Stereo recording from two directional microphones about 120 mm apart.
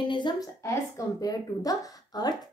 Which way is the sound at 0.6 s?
30° left (ahead or behind).